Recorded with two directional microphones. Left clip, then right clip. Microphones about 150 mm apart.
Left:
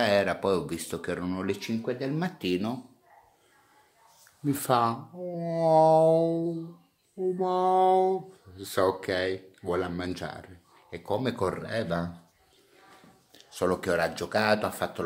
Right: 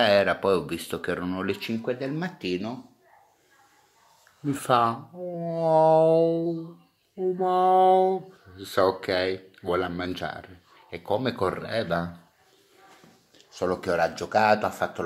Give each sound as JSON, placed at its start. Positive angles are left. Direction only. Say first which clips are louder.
{"t": 0.0, "sound": "speech", "louder": "right 4 dB", "side_deg": 5}
{"t": 2.0, "sound": "speech", "louder": "right 1 dB", "side_deg": 25}
{"t": 4.5, "sound": "speech", "louder": "right 3 dB", "side_deg": 15}
{"t": 13.7, "sound": "speech", "louder": "right 2 dB", "side_deg": 20}